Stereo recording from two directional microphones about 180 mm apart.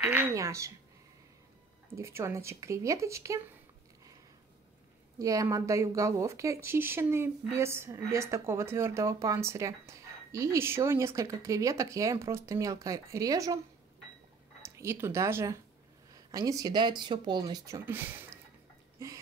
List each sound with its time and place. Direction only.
0.0 s a woman's voice: 10° right (ahead or behind)
2.0 s a woman's voice: 15° right (ahead or behind)
5.2 s a woman's voice: 20° right (ahead or behind)
14.8 s a woman's voice: 15° right (ahead or behind)